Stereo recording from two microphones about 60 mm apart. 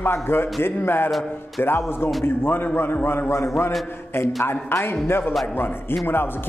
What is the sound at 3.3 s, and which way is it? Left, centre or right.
A man's voice, left.